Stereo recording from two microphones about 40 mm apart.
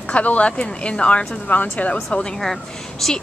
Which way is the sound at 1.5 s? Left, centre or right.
Left.